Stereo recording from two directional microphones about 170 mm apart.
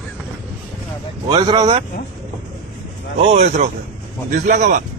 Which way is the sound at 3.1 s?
45° right (ahead or behind).